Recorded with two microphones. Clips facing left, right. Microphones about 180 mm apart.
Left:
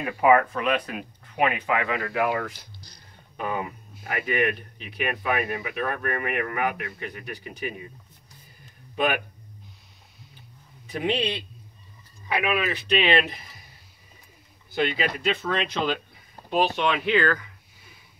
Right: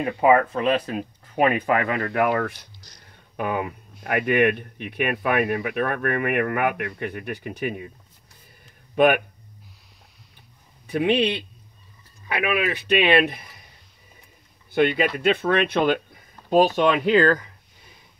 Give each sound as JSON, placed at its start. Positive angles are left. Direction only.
{"t": 0.0, "sound": "speech", "side_deg": -25}
{"t": 8.9, "sound": "speech", "side_deg": -55}
{"t": 10.9, "sound": "speech", "side_deg": -60}
{"t": 12.3, "sound": "speech", "side_deg": -55}
{"t": 14.7, "sound": "speech", "side_deg": -55}
{"t": 16.4, "sound": "speech", "side_deg": -40}